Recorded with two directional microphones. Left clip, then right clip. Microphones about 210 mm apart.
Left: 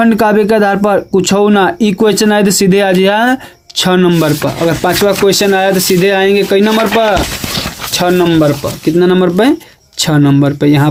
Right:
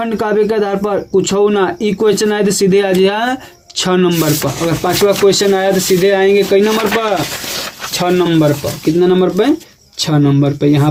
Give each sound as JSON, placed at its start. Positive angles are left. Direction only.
{"t": 0.0, "sound": "speech", "side_deg": 40}